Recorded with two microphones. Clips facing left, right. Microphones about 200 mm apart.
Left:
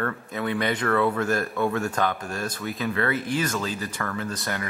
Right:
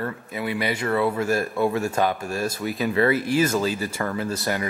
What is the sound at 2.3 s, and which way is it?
Speech, 10° right (ahead or behind).